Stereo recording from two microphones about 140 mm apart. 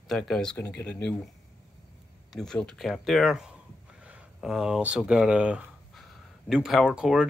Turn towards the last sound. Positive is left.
turn(degrees=-5)  # may be behind; listen again after turning